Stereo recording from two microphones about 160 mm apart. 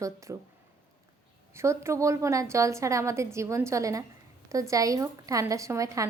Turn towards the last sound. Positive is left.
turn(degrees=-20)  # may be behind; listen again after turning